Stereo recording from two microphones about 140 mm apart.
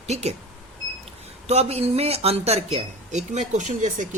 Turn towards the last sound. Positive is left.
turn(degrees=-60)  # may be behind; listen again after turning